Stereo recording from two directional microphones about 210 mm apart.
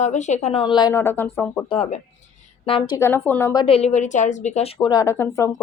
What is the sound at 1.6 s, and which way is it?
Speech, 25° left (ahead or behind).